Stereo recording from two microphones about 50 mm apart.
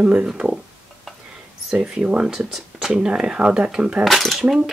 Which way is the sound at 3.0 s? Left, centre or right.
Centre.